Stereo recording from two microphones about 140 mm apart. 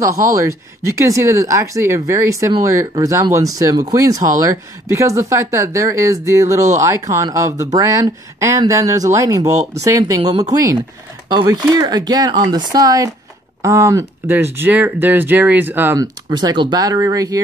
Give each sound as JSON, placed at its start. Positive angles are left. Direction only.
{"t": 0.0, "sound": "speech", "side_deg": -20}
{"t": 16.0, "sound": "speech", "side_deg": -30}